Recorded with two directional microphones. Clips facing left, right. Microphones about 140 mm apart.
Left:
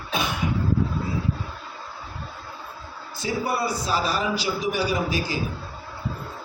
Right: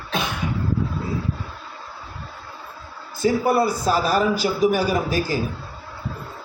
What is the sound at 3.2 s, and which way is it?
A man's voice, 50° right (ahead or behind).